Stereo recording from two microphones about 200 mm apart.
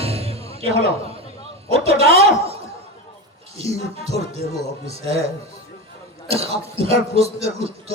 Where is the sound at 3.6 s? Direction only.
30° right (ahead or behind).